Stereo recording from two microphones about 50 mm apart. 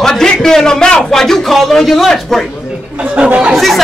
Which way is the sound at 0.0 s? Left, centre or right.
Centre.